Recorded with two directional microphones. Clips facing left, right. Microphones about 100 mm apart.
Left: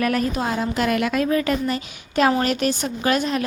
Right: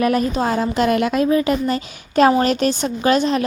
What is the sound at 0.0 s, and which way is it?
Speech, 20° right (ahead or behind).